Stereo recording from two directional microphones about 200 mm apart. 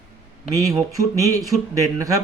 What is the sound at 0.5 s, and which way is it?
Speech, 15° right (ahead or behind).